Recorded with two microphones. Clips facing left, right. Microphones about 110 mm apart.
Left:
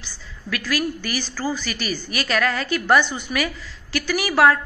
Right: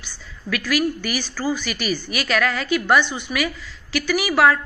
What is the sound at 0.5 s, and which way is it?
A woman's voice, 35° left (ahead or behind).